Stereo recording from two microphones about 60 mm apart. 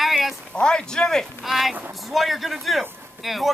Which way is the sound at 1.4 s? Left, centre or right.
Centre.